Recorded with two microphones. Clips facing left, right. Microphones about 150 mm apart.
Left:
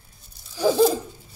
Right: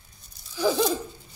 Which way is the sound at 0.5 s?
40° left (ahead or behind).